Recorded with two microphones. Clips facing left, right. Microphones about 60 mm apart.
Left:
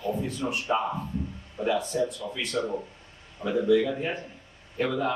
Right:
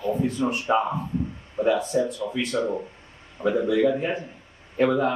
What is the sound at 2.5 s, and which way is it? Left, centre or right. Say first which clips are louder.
Speech: right 3 dB; right.